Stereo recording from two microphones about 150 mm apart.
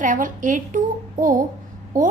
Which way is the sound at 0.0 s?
60° right (ahead or behind).